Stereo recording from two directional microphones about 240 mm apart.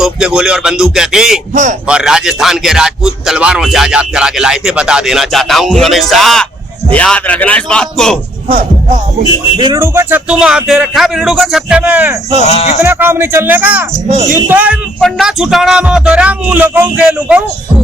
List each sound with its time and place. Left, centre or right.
0.0 s speech: centre
9.6 s speech: centre
12.4 s speech: left
12.8 s speech: centre
14.1 s a woman's voice: right
14.3 s speech: centre